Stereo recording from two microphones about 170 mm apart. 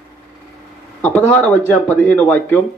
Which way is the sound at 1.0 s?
10° left (ahead or behind).